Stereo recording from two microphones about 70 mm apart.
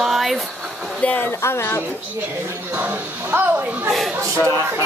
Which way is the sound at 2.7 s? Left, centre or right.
Right.